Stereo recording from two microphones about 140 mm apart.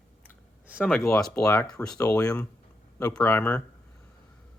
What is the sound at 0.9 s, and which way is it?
Speech, 5° left (ahead or behind).